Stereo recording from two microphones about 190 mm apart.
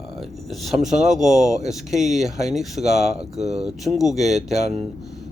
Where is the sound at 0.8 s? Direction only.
Centre (ahead or behind).